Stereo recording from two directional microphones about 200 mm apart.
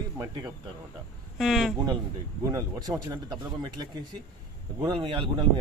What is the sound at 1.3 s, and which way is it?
Speech, centre (ahead or behind).